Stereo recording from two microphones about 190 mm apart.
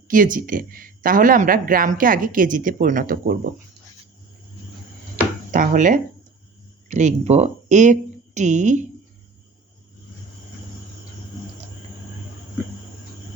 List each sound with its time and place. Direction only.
0.1 s speech: 45° right (ahead or behind)
5.5 s speech: 45° right (ahead or behind)